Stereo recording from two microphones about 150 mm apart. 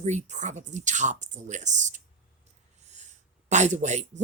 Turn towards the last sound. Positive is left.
turn(degrees=-50)  # may be behind; listen again after turning